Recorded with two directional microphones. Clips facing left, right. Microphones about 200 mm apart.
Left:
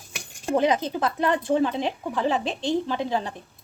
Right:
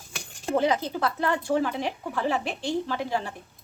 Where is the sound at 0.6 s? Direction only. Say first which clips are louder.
Left 2 dB; 20° left (ahead or behind).